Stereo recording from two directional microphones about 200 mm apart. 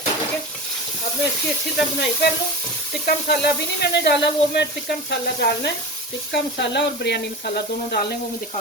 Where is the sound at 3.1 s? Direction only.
55° left (ahead or behind).